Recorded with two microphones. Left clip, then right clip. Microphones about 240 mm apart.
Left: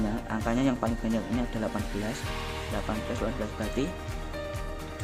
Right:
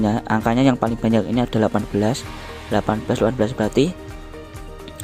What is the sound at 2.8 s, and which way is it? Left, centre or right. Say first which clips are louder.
Speech: right 14 dB; right.